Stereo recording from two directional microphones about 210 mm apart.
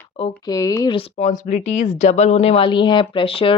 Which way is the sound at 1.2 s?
35° left (ahead or behind).